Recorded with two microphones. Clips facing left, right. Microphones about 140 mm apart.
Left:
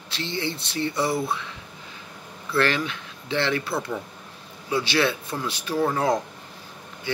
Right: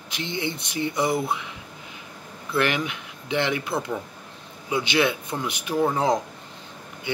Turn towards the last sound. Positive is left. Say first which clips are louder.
# right 1 dB
turn(degrees=-20)  # may be behind; listen again after turning